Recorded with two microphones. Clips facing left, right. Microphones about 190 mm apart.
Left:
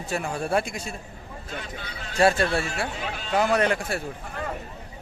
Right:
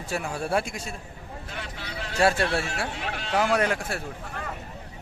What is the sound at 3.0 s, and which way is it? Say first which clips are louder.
Speech: even; 80° right.